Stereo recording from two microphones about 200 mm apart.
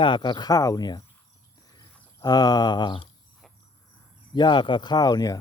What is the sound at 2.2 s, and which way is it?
Speech, 20° left (ahead or behind).